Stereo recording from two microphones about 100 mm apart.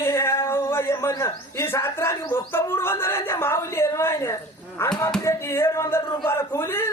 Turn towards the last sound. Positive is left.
turn(degrees=25)  # may be behind; listen again after turning